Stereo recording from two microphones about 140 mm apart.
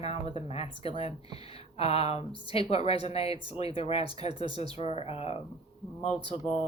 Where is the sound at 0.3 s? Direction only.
45° left (ahead or behind).